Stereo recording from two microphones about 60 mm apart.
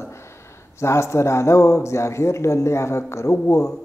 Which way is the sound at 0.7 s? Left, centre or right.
Left.